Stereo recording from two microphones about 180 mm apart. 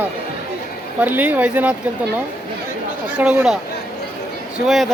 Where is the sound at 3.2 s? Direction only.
5° right (ahead or behind).